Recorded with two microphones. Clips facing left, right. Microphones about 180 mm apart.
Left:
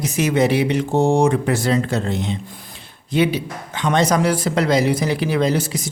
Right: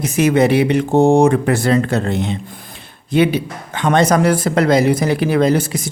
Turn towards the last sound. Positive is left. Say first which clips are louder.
# right 4 dB
turn(degrees=-55)  # may be behind; listen again after turning